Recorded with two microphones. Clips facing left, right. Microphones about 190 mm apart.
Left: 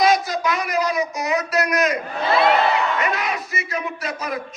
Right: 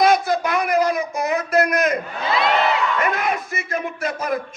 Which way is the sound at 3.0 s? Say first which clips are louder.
Right 2 dB; 50° right (ahead or behind).